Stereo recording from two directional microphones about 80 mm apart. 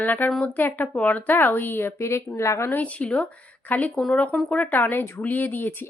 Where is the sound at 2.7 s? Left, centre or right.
Centre.